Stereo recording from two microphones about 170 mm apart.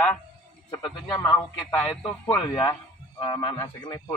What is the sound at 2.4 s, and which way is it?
Speech, 25° left (ahead or behind).